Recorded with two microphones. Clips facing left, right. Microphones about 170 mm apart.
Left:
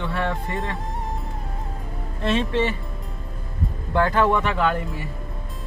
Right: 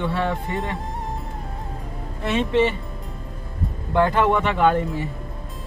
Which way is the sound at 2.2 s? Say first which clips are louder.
Even; 10° right (ahead or behind).